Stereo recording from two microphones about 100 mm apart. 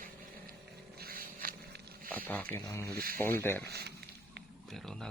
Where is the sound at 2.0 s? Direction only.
15° left (ahead or behind).